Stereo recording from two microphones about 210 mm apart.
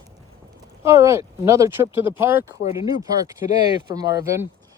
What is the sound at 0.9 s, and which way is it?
Speech, 15° right (ahead or behind).